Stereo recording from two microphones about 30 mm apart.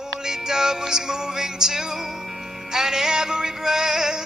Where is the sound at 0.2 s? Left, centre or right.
Right.